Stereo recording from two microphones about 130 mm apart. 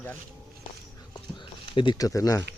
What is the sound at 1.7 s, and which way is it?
Speech, 35° left (ahead or behind).